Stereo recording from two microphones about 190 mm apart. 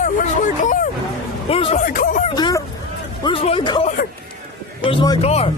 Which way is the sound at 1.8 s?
45° left (ahead or behind).